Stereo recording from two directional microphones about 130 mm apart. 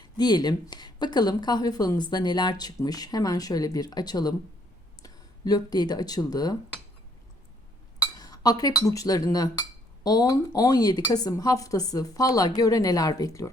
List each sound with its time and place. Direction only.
0.0 s speech: 30° left (ahead or behind)
8.1 s speech: 30° left (ahead or behind)